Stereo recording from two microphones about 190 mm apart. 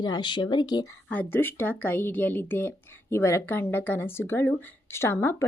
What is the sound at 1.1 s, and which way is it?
Speech, 10° left (ahead or behind).